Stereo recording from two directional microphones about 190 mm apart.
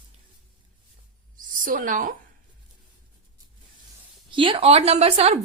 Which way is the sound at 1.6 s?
45° right (ahead or behind).